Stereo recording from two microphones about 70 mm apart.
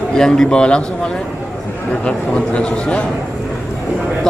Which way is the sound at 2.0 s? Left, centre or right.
Centre.